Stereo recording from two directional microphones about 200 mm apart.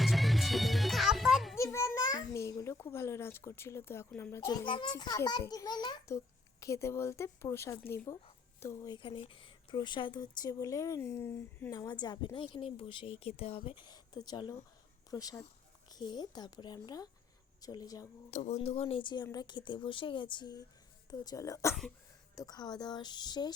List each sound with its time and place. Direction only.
0.0 s music: centre (ahead or behind)
1.5 s a child's voice: 15° left (ahead or behind)
18.3 s a woman's voice: 35° left (ahead or behind)